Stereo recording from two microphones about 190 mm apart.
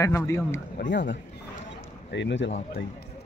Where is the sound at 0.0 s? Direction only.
15° left (ahead or behind).